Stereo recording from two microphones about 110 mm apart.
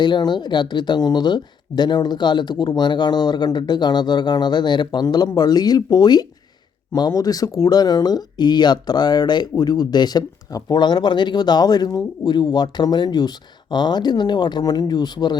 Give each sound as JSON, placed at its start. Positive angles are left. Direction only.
{"t": 0.0, "sound": "speech", "side_deg": 45}